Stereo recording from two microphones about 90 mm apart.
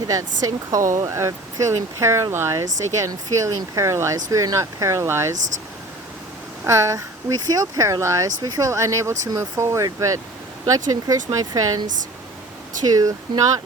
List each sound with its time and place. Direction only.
0.1 s speech: 40° right (ahead or behind)
6.7 s speech: 35° right (ahead or behind)
12.9 s speech: 45° right (ahead or behind)